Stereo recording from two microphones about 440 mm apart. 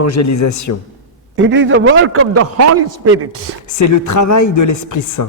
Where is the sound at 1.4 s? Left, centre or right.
Right.